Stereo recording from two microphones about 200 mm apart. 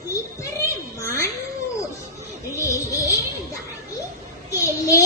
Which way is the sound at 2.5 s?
15° left (ahead or behind).